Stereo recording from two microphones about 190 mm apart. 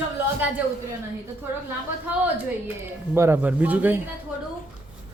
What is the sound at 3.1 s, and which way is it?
Speech, 10° right (ahead or behind).